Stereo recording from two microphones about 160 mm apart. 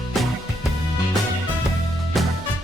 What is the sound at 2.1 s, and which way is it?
Music, centre (ahead or behind).